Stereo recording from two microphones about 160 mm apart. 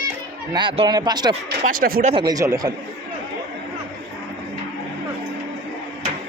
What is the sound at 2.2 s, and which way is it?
Speech, 20° right (ahead or behind).